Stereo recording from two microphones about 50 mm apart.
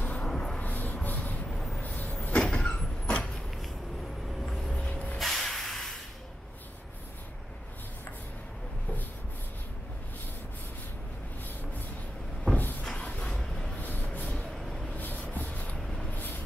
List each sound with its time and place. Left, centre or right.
0.0 s vehicle: left
0.3 s vehicle: centre
0.6 s a sound: left
1.0 s vehicle: left
4.5 s vehicle: centre
4.8 s a sound: left
5.2 s hiss: centre
12.8 s cupboard open or close: centre
13.2 s vehicle: centre
13.7 s vehicle: left
14.5 s vehicle: centre
15.0 s vehicle: left